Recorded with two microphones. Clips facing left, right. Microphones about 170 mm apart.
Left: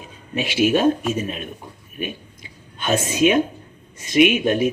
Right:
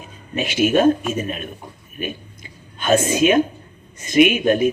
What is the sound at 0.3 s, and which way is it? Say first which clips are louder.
Speech: right 1 dB; 45° right (ahead or behind).